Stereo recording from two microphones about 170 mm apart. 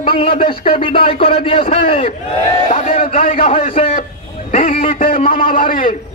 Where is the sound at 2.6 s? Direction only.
50° left (ahead or behind).